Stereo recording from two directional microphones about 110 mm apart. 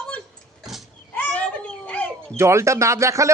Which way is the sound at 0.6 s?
Centre (ahead or behind).